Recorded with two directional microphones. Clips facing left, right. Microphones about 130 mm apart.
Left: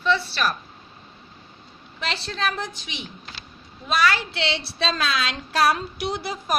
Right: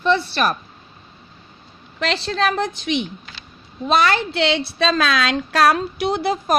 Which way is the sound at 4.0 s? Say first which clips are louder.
Right 4 dB; 55° right (ahead or behind).